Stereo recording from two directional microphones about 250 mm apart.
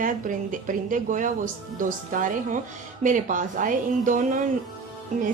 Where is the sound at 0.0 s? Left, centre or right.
Right.